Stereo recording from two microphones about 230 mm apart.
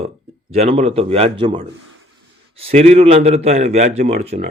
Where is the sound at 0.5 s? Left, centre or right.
Right.